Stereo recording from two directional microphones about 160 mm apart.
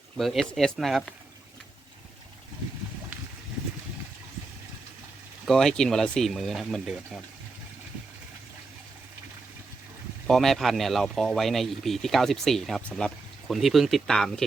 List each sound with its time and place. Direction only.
0.2 s speech: centre (ahead or behind)
5.5 s speech: centre (ahead or behind)
10.2 s speech: centre (ahead or behind)